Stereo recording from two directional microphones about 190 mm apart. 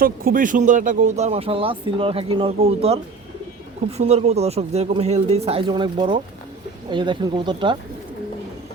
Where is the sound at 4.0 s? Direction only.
35° right (ahead or behind).